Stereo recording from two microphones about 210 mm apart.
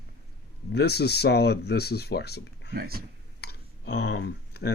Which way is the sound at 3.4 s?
50° left (ahead or behind).